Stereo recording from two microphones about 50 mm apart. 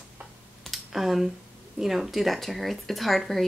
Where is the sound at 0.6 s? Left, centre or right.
Centre.